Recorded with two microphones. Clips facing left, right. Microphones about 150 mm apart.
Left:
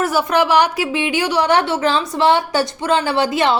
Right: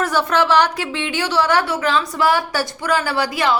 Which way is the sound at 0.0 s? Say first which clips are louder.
Left 2 dB; 10° left (ahead or behind).